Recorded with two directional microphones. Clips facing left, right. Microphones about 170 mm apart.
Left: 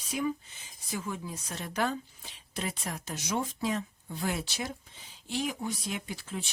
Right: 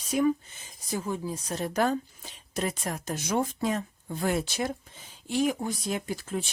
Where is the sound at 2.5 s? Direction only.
45° right (ahead or behind).